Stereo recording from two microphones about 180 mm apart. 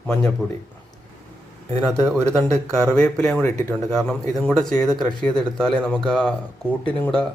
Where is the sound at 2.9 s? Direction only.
5° left (ahead or behind).